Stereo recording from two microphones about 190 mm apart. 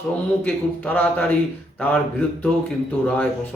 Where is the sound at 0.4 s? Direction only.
10° left (ahead or behind).